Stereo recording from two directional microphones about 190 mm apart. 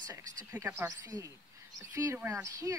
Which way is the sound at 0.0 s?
20° right (ahead or behind).